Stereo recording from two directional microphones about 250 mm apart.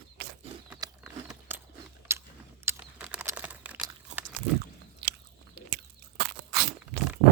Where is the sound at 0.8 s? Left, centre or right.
Centre.